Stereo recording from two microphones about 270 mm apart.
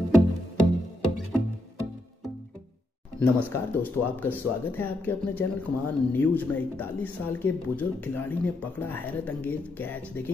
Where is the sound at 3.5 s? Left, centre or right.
Centre.